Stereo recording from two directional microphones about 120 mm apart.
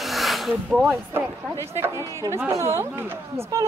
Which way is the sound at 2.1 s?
20° right (ahead or behind).